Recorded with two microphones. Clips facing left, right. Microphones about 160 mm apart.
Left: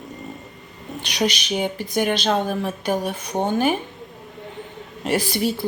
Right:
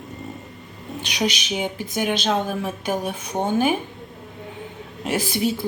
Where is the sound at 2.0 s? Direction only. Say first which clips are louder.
Even; 5° right (ahead or behind).